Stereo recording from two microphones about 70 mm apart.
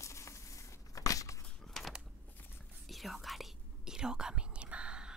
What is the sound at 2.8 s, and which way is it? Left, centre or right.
Whispering, centre.